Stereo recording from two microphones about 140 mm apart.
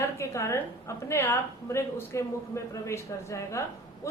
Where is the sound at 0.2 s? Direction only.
20° left (ahead or behind).